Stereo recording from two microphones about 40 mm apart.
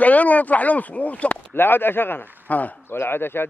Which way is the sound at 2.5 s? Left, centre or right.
Left.